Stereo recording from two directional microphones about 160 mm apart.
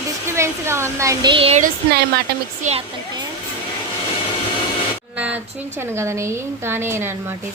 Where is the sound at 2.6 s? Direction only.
50° right (ahead or behind).